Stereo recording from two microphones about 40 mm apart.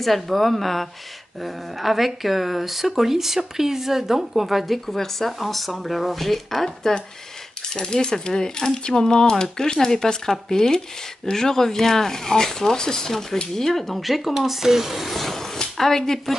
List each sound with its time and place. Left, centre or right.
0.0 s speech: centre